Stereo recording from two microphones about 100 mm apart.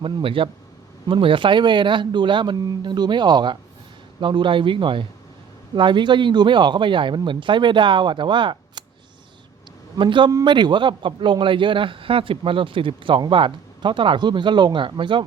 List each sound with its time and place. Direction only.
0.0 s a man's voice: 60° right (ahead or behind)
10.0 s a man's voice: 55° right (ahead or behind)